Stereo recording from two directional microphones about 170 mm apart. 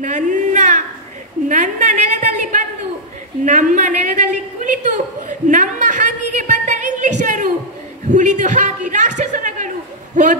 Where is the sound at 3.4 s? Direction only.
45° right (ahead or behind).